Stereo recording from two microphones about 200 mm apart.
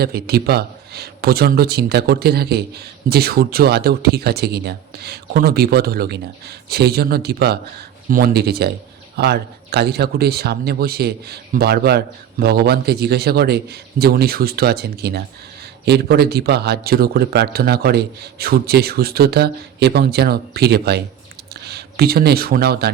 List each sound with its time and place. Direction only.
0.0 s a man's voice: 50° right (ahead or behind)